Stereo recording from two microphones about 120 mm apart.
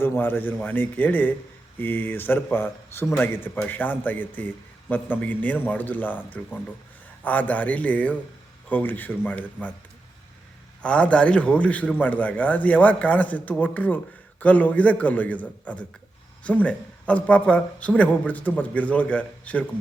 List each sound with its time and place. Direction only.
0.0 s a man's voice: 15° left (ahead or behind)
10.8 s a man's voice: 10° left (ahead or behind)